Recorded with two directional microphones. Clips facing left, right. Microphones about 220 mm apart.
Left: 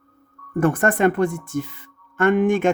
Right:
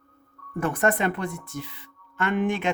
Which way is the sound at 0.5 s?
50° left (ahead or behind).